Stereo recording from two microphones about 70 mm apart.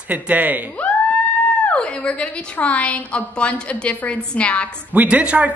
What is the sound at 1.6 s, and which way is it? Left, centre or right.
A woman's voice, centre.